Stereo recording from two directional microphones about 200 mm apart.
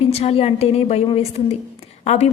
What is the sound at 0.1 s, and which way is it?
A woman's voice, 30° left (ahead or behind).